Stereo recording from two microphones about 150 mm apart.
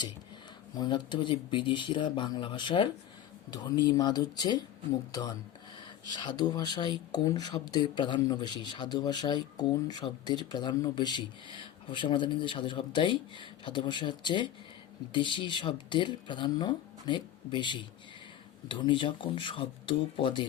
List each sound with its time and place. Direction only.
0.8 s speech: 30° left (ahead or behind)
6.1 s speech: 30° left (ahead or behind)